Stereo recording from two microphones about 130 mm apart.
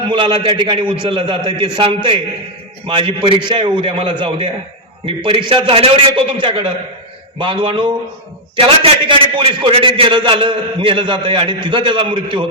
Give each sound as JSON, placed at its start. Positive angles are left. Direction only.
{"t": 0.1, "sound": "a man's voice", "side_deg": -40}